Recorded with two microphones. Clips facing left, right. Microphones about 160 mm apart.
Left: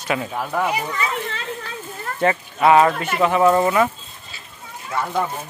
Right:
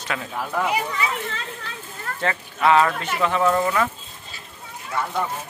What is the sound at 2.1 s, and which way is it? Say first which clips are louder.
Speech: left 7 dB; 15° left (ahead or behind).